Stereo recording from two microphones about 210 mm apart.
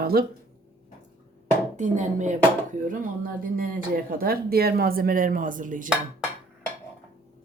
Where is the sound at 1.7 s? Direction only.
35° right (ahead or behind).